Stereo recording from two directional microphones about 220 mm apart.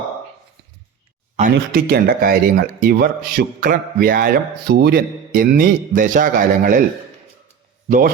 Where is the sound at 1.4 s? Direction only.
40° right (ahead or behind).